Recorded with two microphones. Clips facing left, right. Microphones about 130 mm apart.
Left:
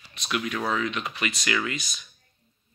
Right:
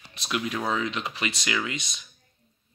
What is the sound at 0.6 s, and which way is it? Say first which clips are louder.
Speech: even; 20° right (ahead or behind).